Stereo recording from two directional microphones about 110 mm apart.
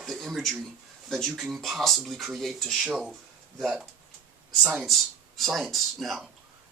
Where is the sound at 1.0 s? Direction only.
Centre (ahead or behind).